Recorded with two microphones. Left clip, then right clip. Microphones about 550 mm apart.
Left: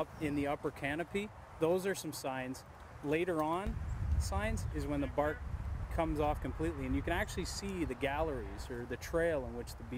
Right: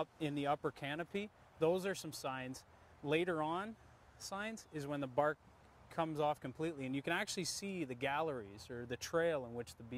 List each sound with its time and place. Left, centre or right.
0.0 s speech: right